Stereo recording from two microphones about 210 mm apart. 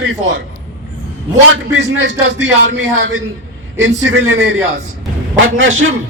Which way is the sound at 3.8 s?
70° right (ahead or behind).